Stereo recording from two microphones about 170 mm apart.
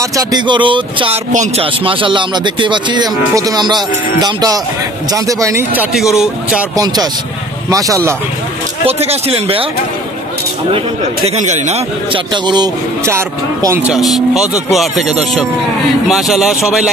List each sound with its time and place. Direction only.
0.0 s speech: 20° right (ahead or behind)
1.3 s speech: 45° right (ahead or behind)
1.9 s speech: 30° right (ahead or behind)
7.7 s speech: 20° right (ahead or behind)
8.8 s speech: 35° right (ahead or behind)
11.2 s speech: 45° right (ahead or behind)
12.1 s speech: 25° right (ahead or behind)
13.8 s speech: centre (ahead or behind)